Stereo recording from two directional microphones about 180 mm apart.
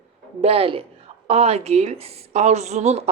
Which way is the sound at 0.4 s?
30° right (ahead or behind).